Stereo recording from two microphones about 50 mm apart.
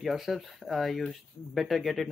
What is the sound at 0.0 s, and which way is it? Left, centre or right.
Speech, centre.